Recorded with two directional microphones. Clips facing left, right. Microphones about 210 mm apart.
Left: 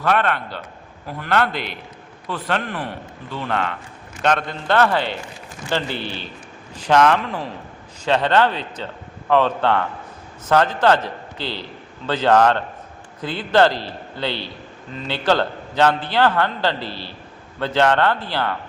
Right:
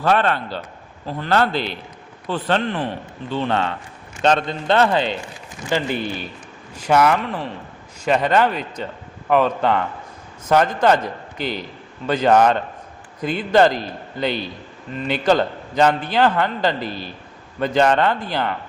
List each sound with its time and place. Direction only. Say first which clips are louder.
0.0 s a man's voice: right 2 dB; 30° right (ahead or behind); by 18.5 s 15° right (ahead or behind)